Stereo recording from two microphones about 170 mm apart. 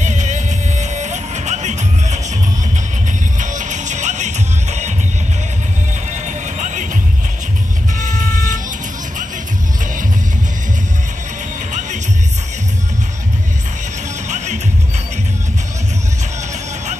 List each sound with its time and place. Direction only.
0.0 s music: 45° right (ahead or behind)
3.3 s music: 45° right (ahead or behind)
6.2 s music: 45° right (ahead or behind)
8.0 s music: 50° right (ahead or behind)
14.3 s music: 45° right (ahead or behind)